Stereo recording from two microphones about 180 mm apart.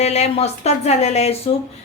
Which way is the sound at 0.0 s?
35° left (ahead or behind).